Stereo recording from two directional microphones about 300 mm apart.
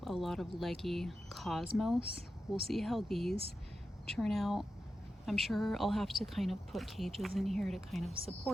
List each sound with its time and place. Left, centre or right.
0.0 s speech: centre
8.1 s speech: centre